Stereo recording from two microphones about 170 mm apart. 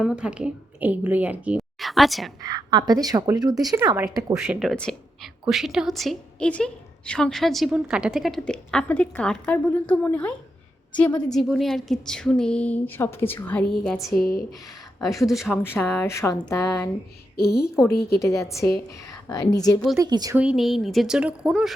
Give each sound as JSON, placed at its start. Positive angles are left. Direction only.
{"t": 0.0, "sound": "a woman's voice", "side_deg": -5}
{"t": 2.4, "sound": "a woman's voice", "side_deg": -25}
{"t": 4.4, "sound": "a woman's voice", "side_deg": 0}
{"t": 15.6, "sound": "speech", "side_deg": 10}
{"t": 17.3, "sound": "a woman's voice", "side_deg": 65}
{"t": 18.2, "sound": "a woman's voice", "side_deg": 15}
{"t": 20.0, "sound": "a woman's voice", "side_deg": -25}
{"t": 20.3, "sound": "a woman's voice", "side_deg": -5}